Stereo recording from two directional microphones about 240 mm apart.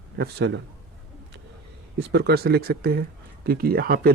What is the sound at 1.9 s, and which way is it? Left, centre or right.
Speech, right.